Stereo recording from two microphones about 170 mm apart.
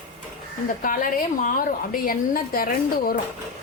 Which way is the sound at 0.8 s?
55° left (ahead or behind).